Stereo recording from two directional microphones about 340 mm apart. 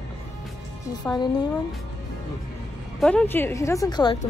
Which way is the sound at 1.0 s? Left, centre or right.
Centre.